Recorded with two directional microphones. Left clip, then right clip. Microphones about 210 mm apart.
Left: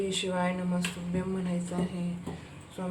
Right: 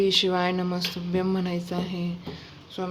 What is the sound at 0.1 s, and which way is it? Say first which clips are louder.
A woman's voice: right 8 dB; 50° right (ahead or behind).